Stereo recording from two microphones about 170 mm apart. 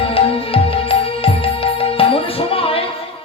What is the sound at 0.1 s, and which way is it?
Music, 35° left (ahead or behind).